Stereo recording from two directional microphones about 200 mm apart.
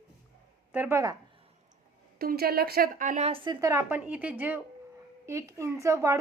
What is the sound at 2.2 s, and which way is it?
A woman's voice, 50° right (ahead or behind).